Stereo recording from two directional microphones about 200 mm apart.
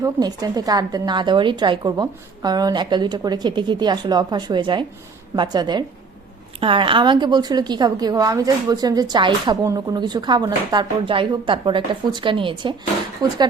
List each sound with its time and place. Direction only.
0.0 s a woman's voice: 20° right (ahead or behind)